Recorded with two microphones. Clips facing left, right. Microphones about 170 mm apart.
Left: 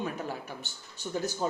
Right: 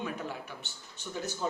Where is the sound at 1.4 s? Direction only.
40° left (ahead or behind).